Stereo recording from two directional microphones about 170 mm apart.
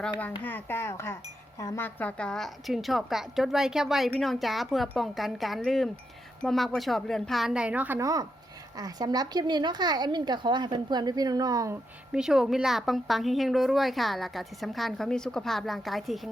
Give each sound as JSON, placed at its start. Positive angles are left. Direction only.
{"t": 0.0, "sound": "wind chime", "side_deg": 10}
{"t": 8.7, "sound": "a woman's voice", "side_deg": -20}
{"t": 12.1, "sound": "wind chime", "side_deg": -5}